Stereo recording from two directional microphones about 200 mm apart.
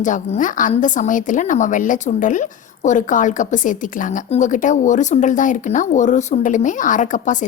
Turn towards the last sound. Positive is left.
turn(degrees=40)  # may be behind; listen again after turning